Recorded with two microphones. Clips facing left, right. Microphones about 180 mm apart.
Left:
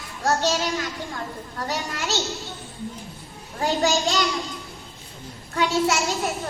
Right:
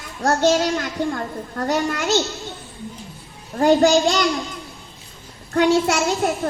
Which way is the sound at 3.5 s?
55° right (ahead or behind).